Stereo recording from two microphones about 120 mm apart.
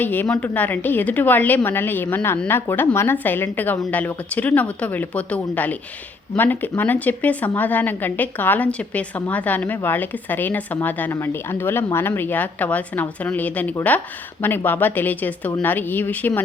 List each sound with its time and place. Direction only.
0.0 s a woman's voice: 15° left (ahead or behind)